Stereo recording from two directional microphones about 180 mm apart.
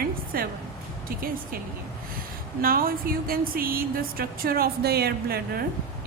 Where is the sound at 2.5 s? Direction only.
55° right (ahead or behind).